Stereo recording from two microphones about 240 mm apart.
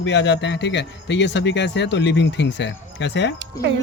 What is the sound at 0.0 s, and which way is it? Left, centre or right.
Speech, left.